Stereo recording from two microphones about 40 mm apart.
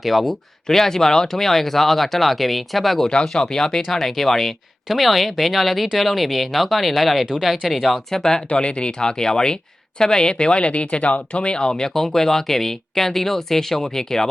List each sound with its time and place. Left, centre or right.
0.0 s speech: centre
0.7 s speech: centre
3.0 s speech: centre
8.2 s speech: centre
8.4 s speech: left